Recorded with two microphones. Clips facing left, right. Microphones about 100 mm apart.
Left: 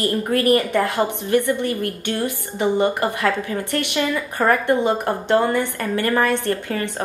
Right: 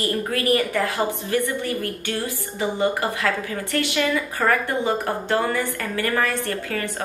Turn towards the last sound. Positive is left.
turn(degrees=25)  # may be behind; listen again after turning